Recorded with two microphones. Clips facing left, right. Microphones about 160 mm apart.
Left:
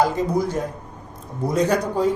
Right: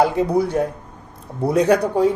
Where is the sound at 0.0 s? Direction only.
65° right (ahead or behind).